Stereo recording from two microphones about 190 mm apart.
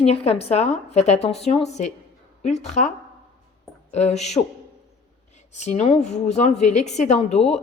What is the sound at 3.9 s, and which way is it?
Speech, 35° left (ahead or behind).